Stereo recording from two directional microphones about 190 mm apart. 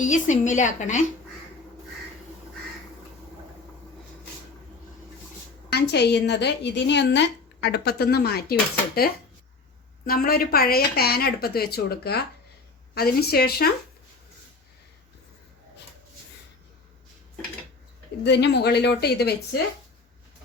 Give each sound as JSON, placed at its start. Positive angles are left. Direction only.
{"t": 0.0, "sound": "a woman's voice", "side_deg": 40}
{"t": 5.7, "sound": "a woman's voice", "side_deg": 60}
{"t": 10.1, "sound": "a woman's voice", "side_deg": 50}
{"t": 18.2, "sound": "a woman's voice", "side_deg": 65}